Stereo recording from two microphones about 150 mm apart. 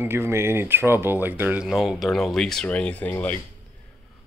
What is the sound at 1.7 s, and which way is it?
Speech, centre (ahead or behind).